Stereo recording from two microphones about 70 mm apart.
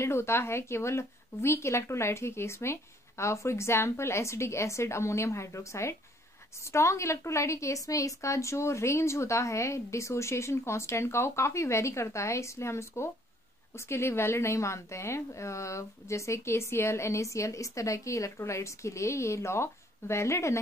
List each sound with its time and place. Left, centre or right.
0.0 s speech: left